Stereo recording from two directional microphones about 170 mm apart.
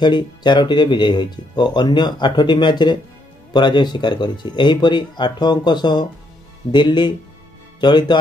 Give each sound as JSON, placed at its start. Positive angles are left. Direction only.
{"t": 0.0, "sound": "speech", "side_deg": 25}